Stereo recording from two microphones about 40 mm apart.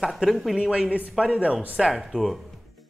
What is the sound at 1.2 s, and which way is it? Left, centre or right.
A man's voice, centre.